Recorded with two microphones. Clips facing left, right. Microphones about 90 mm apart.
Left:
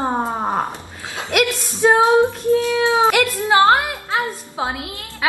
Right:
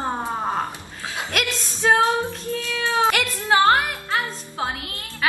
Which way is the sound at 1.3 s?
15° left (ahead or behind).